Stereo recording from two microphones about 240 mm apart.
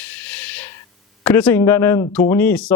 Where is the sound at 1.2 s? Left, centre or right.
Centre.